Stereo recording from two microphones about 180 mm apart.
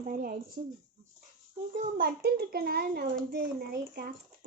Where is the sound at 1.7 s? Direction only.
50° right (ahead or behind).